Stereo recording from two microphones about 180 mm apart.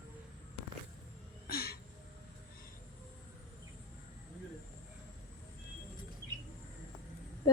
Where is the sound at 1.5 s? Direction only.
60° left (ahead or behind).